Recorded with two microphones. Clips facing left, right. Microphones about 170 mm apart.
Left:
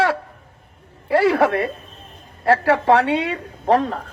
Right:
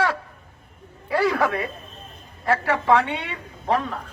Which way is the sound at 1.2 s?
30° left (ahead or behind).